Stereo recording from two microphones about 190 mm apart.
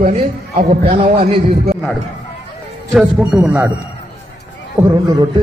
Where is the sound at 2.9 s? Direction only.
Centre (ahead or behind).